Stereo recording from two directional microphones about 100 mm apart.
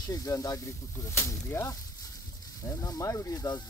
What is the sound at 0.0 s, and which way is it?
Speech, 35° left (ahead or behind).